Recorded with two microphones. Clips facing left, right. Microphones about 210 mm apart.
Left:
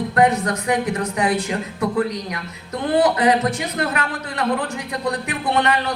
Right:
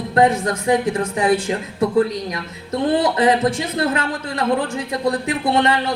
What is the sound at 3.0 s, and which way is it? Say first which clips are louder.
Speech: left 3 dB; 25° right (ahead or behind).